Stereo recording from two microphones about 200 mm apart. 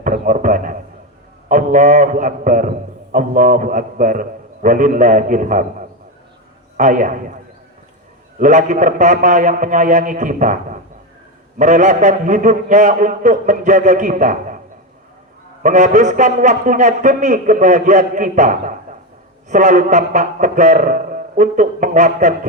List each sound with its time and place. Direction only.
0.0 s a man's voice: 40° right (ahead or behind)
6.7 s a man's voice: 40° right (ahead or behind)
8.4 s a man's voice: 40° right (ahead or behind)
15.6 s a man's voice: 40° right (ahead or behind)